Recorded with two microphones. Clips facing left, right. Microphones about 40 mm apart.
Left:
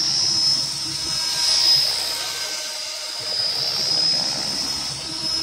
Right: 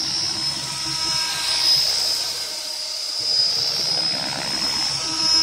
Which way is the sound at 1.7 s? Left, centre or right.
Centre.